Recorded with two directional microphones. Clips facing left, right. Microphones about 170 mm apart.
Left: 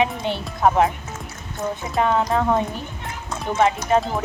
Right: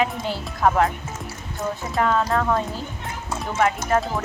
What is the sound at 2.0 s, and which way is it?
Speech, 20° left (ahead or behind).